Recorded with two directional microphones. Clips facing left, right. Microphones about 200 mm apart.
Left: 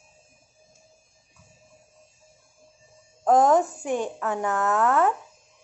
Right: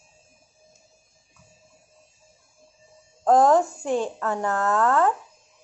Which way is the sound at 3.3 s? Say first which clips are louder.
Right 1 dB; 20° left (ahead or behind).